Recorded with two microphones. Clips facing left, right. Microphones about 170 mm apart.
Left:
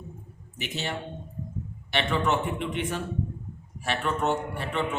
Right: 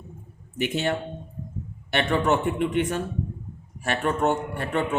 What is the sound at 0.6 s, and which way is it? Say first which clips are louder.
A man's voice: right 8 dB; 50° right (ahead or behind).